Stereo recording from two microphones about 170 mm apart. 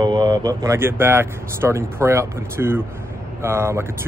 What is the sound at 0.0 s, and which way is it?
Speech, 25° right (ahead or behind).